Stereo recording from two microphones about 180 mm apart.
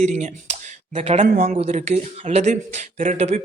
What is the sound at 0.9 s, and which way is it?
Speech, 35° right (ahead or behind).